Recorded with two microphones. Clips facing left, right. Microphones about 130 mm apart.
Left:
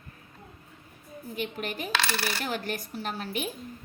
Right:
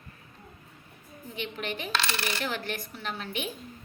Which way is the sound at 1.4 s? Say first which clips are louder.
Left 1 dB; 40° left (ahead or behind).